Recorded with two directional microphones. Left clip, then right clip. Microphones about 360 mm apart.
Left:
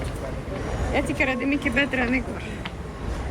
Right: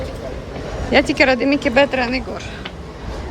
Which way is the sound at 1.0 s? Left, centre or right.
Centre.